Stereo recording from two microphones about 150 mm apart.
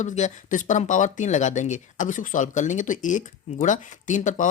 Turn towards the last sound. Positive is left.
turn(degrees=55)  # may be behind; listen again after turning